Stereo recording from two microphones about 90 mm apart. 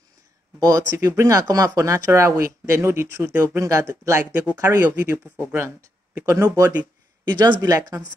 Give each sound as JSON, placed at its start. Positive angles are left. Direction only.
{"t": 0.6, "sound": "speech", "side_deg": -45}
{"t": 6.8, "sound": "speech", "side_deg": -55}